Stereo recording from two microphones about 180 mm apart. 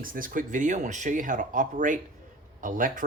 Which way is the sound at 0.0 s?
50° right (ahead or behind).